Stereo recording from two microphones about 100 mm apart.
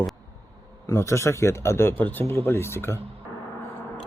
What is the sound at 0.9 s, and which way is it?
Speech, 30° left (ahead or behind).